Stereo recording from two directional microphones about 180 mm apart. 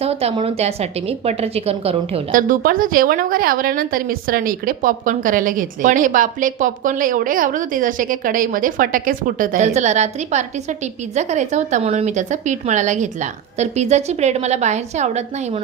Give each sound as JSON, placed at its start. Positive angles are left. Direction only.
{"t": 0.0, "sound": "a woman's voice", "side_deg": -35}
{"t": 2.3, "sound": "a woman's voice", "side_deg": -50}